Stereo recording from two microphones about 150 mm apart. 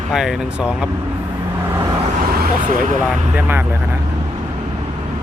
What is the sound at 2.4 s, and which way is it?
Speech, 70° right (ahead or behind).